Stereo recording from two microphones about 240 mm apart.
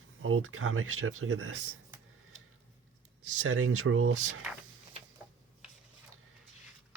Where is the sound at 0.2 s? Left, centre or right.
Right.